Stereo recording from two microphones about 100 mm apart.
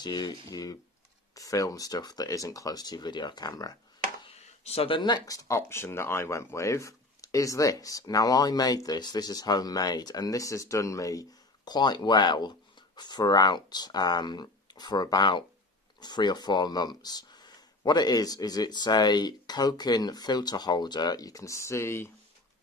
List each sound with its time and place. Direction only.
0.0 s speech: 45° left (ahead or behind)
4.3 s speech: 90° left; by 22.1 s 25° left (ahead or behind)